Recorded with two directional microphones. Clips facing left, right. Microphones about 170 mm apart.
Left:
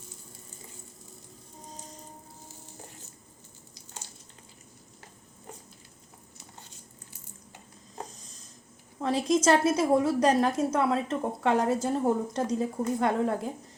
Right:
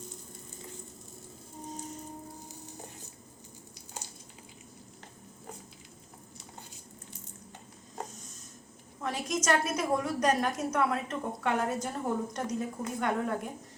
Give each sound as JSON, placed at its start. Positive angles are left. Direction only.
{"t": 9.0, "sound": "a woman's voice", "side_deg": 30}